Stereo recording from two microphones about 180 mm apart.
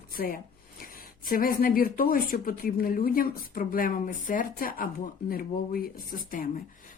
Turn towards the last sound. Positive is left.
turn(degrees=50)  # may be behind; listen again after turning